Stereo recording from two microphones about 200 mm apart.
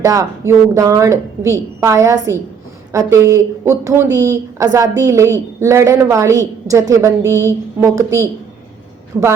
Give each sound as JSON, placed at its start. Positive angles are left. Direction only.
{"t": 0.0, "sound": "a woman's voice", "side_deg": -15}